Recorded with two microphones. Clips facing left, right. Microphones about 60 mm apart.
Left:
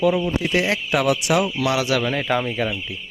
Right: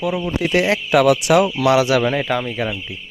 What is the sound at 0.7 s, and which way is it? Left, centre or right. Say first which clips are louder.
Speech: right 5 dB; right.